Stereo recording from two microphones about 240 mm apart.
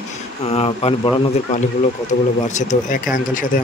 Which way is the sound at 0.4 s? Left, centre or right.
Left.